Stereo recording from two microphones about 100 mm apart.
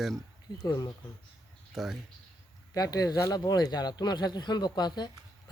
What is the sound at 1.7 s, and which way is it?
Speech, 5° right (ahead or behind).